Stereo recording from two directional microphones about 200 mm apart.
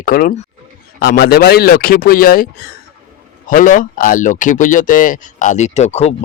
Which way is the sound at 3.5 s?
40° left (ahead or behind).